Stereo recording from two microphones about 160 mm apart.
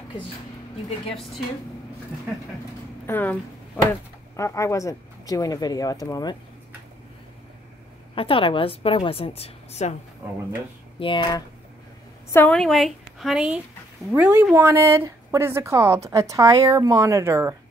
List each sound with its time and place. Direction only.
1.0 s a woman's voice: centre (ahead or behind)
3.1 s speech: 10° left (ahead or behind)
8.1 s a woman's voice: 35° left (ahead or behind)
10.2 s speech: 10° right (ahead or behind)
11.0 s a woman's voice: 30° left (ahead or behind)
12.3 s a woman's voice: 10° left (ahead or behind); by 17.6 s 15° right (ahead or behind)